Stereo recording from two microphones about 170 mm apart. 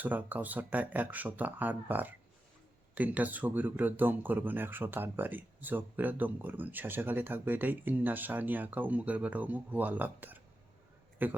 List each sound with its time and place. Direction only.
0.0 s speech: 10° right (ahead or behind)